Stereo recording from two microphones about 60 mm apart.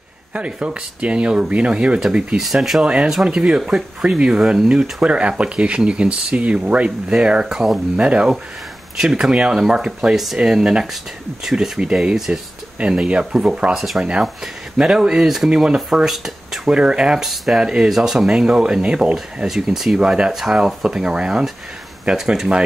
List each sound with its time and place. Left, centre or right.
0.3 s speech: centre
2.3 s speech: centre
2.8 s speech: centre
7.9 s speech: centre
14.2 s speech: centre